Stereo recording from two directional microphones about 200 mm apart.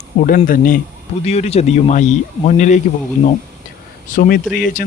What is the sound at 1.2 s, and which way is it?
Speech, 30° left (ahead or behind).